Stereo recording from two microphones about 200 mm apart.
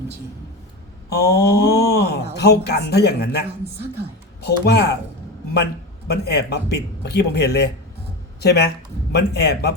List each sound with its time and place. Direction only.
1.1 s speech: 50° left (ahead or behind)
6.1 s a man's voice: 55° left (ahead or behind)